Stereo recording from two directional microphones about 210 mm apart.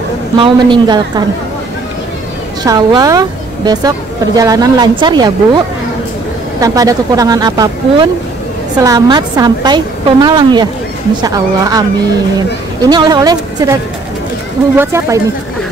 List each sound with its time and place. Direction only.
0.4 s a woman's voice: 20° right (ahead or behind)
2.6 s a woman's voice: 20° right (ahead or behind)
6.6 s a woman's voice: 15° right (ahead or behind)
12.8 s a woman's voice: 20° right (ahead or behind)
14.8 s speech: 10° right (ahead or behind)